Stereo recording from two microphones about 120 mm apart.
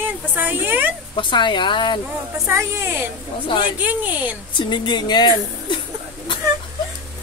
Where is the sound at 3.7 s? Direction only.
15° right (ahead or behind).